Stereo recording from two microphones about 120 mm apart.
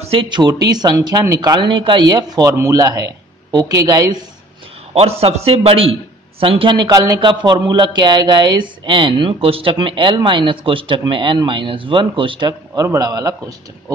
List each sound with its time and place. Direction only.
0.0 s a sound: 55° right (ahead or behind)
0.3 s speech: 35° right (ahead or behind)
5.2 s a man's voice: 55° right (ahead or behind); by 12.8 s 40° right (ahead or behind)
12.8 s a man's voice: 25° right (ahead or behind)